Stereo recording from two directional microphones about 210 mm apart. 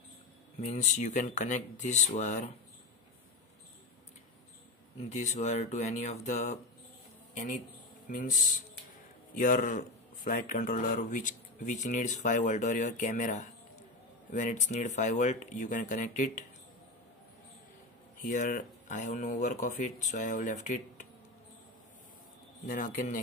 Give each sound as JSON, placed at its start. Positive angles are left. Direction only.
{"t": 0.6, "sound": "speech", "side_deg": 35}
{"t": 5.1, "sound": "speech", "side_deg": 35}
{"t": 18.2, "sound": "speech", "side_deg": 35}
{"t": 22.7, "sound": "speech", "side_deg": 40}